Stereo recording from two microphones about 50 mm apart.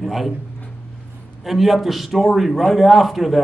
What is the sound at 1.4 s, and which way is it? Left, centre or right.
A man's voice, centre.